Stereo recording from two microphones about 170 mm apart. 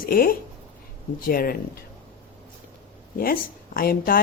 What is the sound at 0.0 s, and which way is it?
Speech, 60° left (ahead or behind).